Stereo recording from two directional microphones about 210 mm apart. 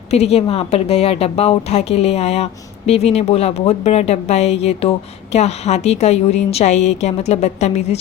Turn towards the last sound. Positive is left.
turn(degrees=30)  # may be behind; listen again after turning